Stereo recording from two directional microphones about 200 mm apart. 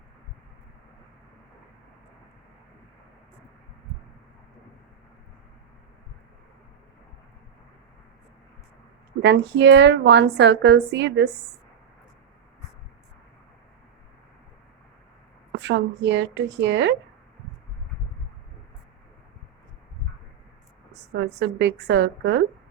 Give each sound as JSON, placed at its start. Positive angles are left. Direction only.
{"t": 9.2, "sound": "a woman's voice", "side_deg": -60}
{"t": 15.5, "sound": "a woman's voice", "side_deg": -60}
{"t": 20.9, "sound": "a woman's voice", "side_deg": -60}